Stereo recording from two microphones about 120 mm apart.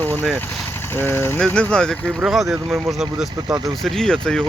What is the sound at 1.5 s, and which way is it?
Speech, 5° left (ahead or behind).